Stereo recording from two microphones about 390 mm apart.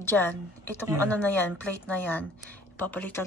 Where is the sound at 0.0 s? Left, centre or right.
Centre.